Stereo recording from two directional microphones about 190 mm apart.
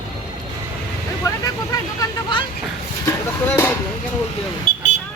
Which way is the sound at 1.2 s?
15° left (ahead or behind).